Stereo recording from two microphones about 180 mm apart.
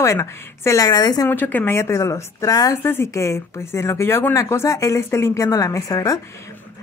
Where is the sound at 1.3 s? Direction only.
10° left (ahead or behind).